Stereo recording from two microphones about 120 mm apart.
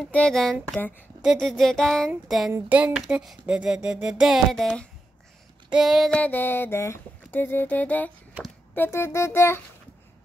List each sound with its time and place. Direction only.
0.0 s speech: 5° left (ahead or behind)
6.1 s a sound: 15° left (ahead or behind)
8.7 s speech: 20° left (ahead or behind)